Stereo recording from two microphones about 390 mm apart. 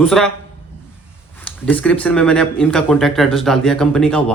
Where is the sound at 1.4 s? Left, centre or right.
Centre.